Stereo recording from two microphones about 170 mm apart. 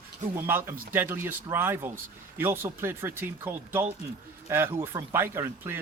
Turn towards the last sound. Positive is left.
turn(degrees=-15)  # may be behind; listen again after turning